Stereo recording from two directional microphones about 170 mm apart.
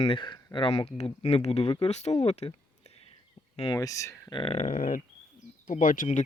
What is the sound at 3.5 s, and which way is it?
Speech, 35° left (ahead or behind).